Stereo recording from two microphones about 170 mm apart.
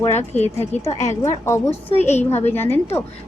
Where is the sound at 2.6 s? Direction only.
10° left (ahead or behind).